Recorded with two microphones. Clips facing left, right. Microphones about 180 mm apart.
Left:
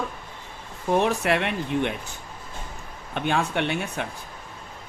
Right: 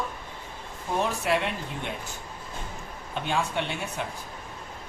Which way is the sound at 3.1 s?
65° left (ahead or behind).